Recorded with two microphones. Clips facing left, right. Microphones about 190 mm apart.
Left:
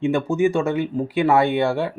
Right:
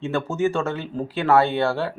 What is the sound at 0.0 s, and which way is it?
A man's voice, 15° left (ahead or behind).